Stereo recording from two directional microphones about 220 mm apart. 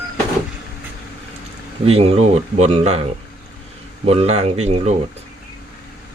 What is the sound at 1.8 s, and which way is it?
Speech, 30° right (ahead or behind).